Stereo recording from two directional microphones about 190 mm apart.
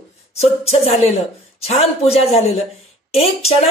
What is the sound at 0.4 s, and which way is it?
Speech, 35° left (ahead or behind).